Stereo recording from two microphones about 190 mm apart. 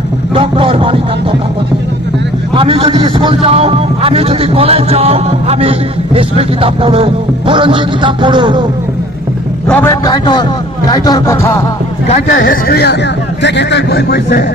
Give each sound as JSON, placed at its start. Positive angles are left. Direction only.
{"t": 0.3, "sound": "speech", "side_deg": -25}
{"t": 2.5, "sound": "a man's voice", "side_deg": -30}
{"t": 9.7, "sound": "a man's voice", "side_deg": 10}
{"t": 10.0, "sound": "a man's voice", "side_deg": 20}
{"t": 10.9, "sound": "music", "side_deg": 20}
{"t": 12.1, "sound": "speech", "side_deg": 45}